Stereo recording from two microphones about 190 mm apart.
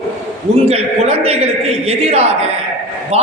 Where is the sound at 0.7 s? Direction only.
30° right (ahead or behind).